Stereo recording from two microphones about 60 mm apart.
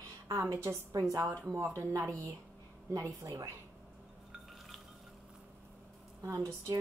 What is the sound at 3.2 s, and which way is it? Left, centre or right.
Speech, right.